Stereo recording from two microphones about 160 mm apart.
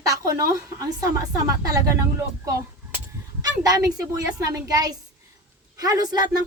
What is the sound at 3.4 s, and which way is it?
A woman's voice, 20° right (ahead or behind).